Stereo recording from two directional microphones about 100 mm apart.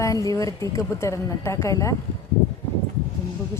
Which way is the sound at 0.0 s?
35° left (ahead or behind).